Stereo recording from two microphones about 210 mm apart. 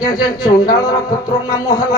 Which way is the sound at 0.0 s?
20° left (ahead or behind).